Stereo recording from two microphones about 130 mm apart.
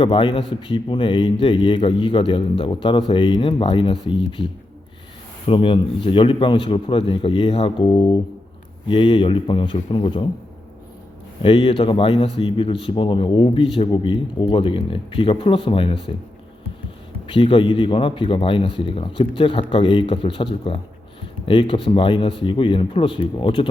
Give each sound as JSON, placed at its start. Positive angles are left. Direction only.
{"t": 0.0, "sound": "a man's voice", "side_deg": 45}
{"t": 5.5, "sound": "a man's voice", "side_deg": 45}
{"t": 11.4, "sound": "a man's voice", "side_deg": 45}
{"t": 17.2, "sound": "a man's voice", "side_deg": 45}